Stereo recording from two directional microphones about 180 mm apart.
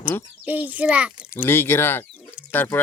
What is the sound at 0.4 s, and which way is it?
Speech, 10° right (ahead or behind).